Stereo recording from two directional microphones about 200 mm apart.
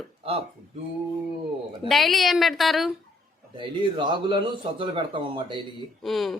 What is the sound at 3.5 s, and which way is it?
A man's voice, 25° right (ahead or behind).